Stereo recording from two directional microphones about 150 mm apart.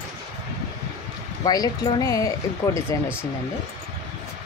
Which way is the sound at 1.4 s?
25° left (ahead or behind).